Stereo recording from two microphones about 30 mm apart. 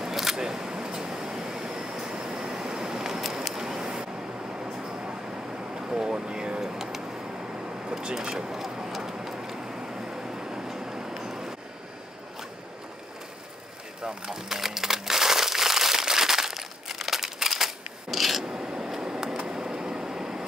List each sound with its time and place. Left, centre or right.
0.0 s single-lens reflex camera: centre
1.9 s vehicle: centre
2.9 s a sound: centre
5.9 s boat: centre
6.2 s vehicle: right
6.7 s a sound: centre
8.4 s vehicle: centre
14.0 s speech: centre
14.6 s crumpling: centre
18.5 s a sound: centre
18.9 s a sound: right
19.8 s vehicle: centre